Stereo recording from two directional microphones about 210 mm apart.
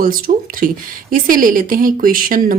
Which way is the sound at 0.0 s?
40° right (ahead or behind).